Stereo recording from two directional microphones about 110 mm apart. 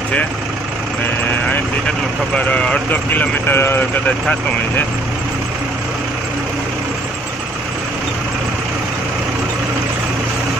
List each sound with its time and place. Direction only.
2.3 s speech: 10° left (ahead or behind)